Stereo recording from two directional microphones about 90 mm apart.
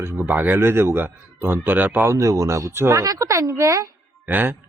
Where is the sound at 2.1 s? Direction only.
35° right (ahead or behind).